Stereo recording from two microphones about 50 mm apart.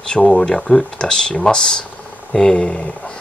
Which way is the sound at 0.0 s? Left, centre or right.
Centre.